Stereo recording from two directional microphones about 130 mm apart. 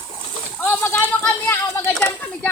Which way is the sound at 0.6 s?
15° left (ahead or behind).